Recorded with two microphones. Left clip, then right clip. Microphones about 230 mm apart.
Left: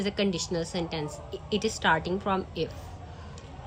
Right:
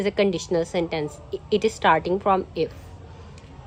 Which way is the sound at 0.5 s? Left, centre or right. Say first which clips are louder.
Right 8 dB; right.